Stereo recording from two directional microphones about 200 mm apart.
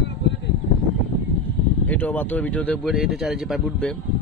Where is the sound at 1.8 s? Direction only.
10° left (ahead or behind).